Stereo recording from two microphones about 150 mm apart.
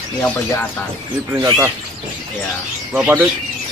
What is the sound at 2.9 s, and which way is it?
Speech, 10° right (ahead or behind).